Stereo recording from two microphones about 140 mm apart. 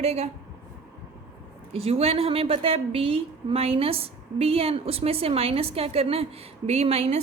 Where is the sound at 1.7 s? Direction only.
45° right (ahead or behind).